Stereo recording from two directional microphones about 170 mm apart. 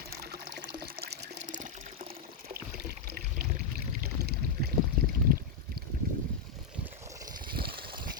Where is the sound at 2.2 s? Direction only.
65° right (ahead or behind).